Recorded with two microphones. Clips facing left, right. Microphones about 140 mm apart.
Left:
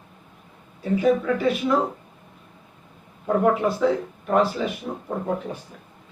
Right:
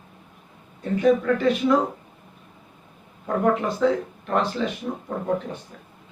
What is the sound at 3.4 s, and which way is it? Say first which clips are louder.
Speech: right 1 dB; 5° left (ahead or behind).